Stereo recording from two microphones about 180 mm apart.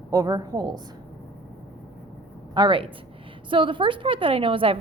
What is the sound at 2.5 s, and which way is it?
A woman's voice, 25° right (ahead or behind).